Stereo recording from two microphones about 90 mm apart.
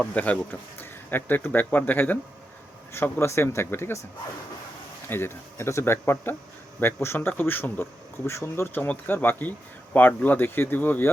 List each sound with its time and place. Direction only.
0.1 s speech: 15° left (ahead or behind)
5.0 s speech: 25° left (ahead or behind)